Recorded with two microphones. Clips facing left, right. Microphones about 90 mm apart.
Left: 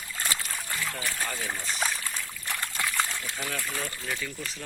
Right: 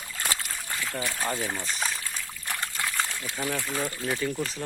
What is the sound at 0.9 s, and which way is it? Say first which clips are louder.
Speech: right 3 dB; 25° right (ahead or behind).